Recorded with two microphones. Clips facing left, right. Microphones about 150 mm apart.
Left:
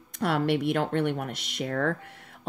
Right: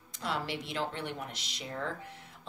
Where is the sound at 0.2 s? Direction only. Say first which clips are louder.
Left 11 dB; 60° left (ahead or behind).